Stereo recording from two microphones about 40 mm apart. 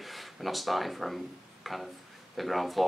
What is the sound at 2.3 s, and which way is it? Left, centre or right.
Speech, centre.